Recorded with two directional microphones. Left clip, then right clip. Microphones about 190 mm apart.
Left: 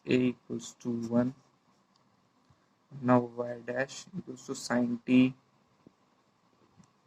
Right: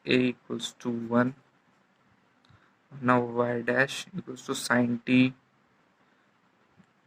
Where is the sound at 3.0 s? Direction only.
20° right (ahead or behind).